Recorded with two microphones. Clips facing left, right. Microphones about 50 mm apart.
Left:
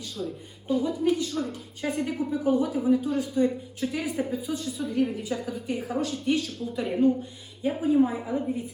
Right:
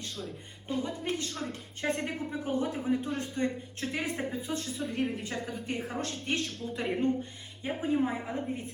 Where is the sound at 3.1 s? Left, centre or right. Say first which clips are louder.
Left 7 dB; right.